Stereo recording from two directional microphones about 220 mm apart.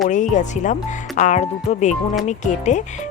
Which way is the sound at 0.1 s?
35° left (ahead or behind).